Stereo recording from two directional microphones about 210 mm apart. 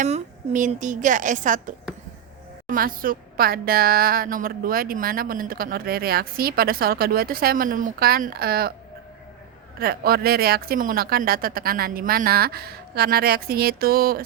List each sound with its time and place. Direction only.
0.0 s a woman's voice: 35° right (ahead or behind)
9.8 s speech: 45° right (ahead or behind)